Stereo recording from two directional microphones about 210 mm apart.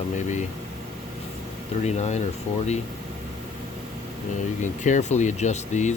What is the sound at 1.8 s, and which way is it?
Speech, 35° left (ahead or behind).